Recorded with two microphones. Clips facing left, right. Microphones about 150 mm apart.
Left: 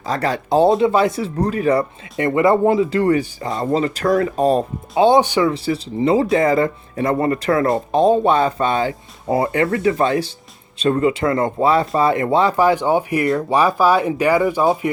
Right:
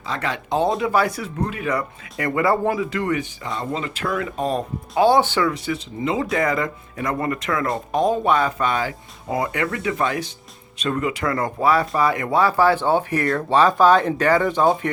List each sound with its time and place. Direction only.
0.0 s speech: 40° left (ahead or behind)
0.8 s speech: 25° left (ahead or behind)
5.0 s speech: 20° left (ahead or behind)
5.5 s speech: 30° left (ahead or behind); by 14.8 s 10° left (ahead or behind)